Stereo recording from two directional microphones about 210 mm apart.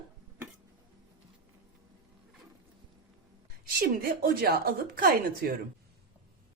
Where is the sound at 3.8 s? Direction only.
45° right (ahead or behind).